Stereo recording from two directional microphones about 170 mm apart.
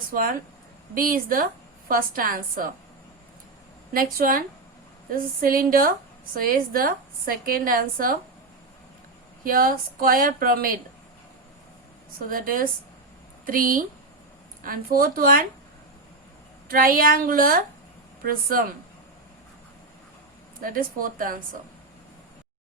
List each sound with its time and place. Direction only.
0.1 s a woman's voice: 55° right (ahead or behind)
3.9 s a woman's voice: 55° right (ahead or behind)
9.4 s a woman's voice: 55° right (ahead or behind)
12.3 s a woman's voice: 55° right (ahead or behind)
16.6 s a woman's voice: 60° right (ahead or behind)
20.6 s a woman's voice: 55° right (ahead or behind)